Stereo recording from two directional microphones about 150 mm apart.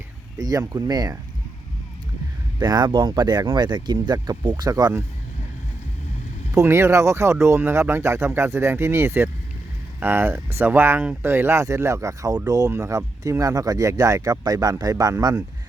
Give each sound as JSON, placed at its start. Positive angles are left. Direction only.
{"t": 0.3, "sound": "speech", "side_deg": -25}
{"t": 2.6, "sound": "speech", "side_deg": -30}
{"t": 6.5, "sound": "speech", "side_deg": -20}